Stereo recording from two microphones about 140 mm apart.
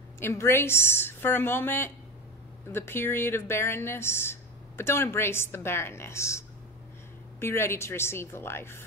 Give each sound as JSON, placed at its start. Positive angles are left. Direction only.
{"t": 0.2, "sound": "speech", "side_deg": 15}